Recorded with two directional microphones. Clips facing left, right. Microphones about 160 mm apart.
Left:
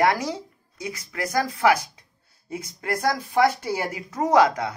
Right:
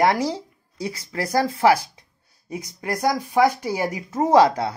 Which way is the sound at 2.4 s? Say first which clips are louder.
Right 1 dB; 15° right (ahead or behind).